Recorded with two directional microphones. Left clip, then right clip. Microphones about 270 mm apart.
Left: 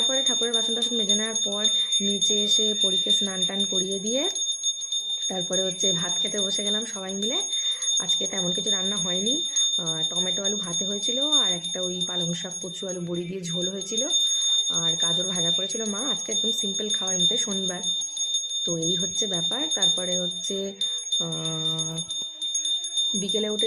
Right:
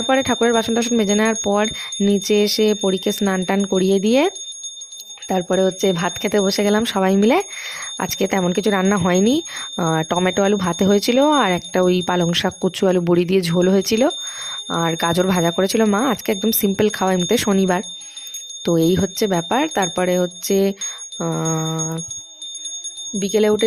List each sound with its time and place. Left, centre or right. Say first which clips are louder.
0.1 s speech: right 7 dB; right
5.3 s speech: right 13 dB; right
23.2 s speech: right 9 dB; right